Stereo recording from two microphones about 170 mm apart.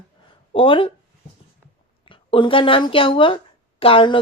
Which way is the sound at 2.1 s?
30° left (ahead or behind).